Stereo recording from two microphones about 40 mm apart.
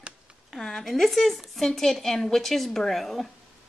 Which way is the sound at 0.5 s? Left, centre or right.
Centre.